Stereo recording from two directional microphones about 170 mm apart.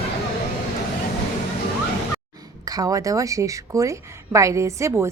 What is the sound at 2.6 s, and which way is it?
A woman's voice, 20° right (ahead or behind).